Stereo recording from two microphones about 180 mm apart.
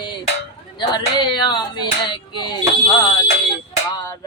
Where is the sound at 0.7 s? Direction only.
25° left (ahead or behind).